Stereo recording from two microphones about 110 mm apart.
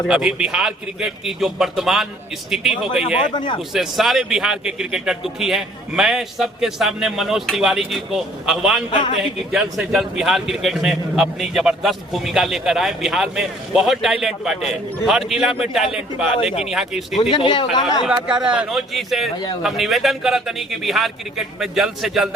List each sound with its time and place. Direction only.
0.1 s a man's voice: 5° right (ahead or behind)
3.3 s a man's voice: 45° left (ahead or behind)
3.7 s a man's voice: 5° right (ahead or behind)
8.9 s a man's voice: 45° left (ahead or behind)
9.5 s a man's voice: 5° right (ahead or behind)
16.4 s speech: 60° left (ahead or behind)
16.6 s a man's voice: centre (ahead or behind)
17.3 s a man's voice: 45° left (ahead or behind)
18.0 s a man's voice: 5° right (ahead or behind)